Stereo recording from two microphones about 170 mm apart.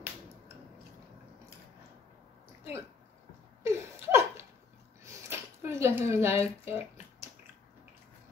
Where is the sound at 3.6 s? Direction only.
15° right (ahead or behind).